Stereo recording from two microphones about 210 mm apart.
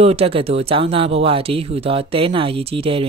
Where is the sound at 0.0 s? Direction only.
30° right (ahead or behind).